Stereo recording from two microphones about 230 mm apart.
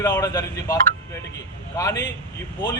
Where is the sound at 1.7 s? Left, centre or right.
Centre.